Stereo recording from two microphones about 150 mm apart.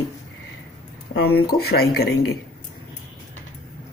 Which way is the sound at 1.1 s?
90° left.